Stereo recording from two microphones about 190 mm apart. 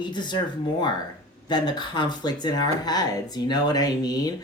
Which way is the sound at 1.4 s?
20° left (ahead or behind).